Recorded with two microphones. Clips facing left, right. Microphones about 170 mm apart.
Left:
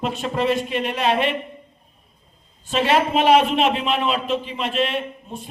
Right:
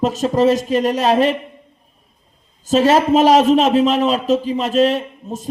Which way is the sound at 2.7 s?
40° right (ahead or behind).